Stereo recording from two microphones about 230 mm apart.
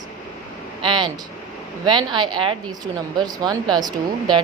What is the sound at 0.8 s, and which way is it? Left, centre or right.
A woman's voice, centre.